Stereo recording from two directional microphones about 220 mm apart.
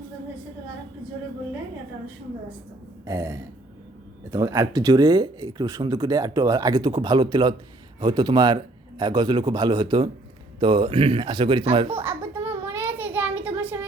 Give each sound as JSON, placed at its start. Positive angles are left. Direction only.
{"t": 3.1, "sound": "speech", "side_deg": -15}
{"t": 12.0, "sound": "a sound", "side_deg": -10}
{"t": 12.6, "sound": "child singing", "side_deg": -10}